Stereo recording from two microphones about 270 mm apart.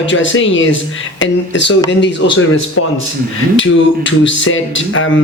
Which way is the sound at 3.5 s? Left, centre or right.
Left.